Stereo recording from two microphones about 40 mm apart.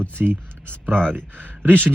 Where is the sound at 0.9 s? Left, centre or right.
Left.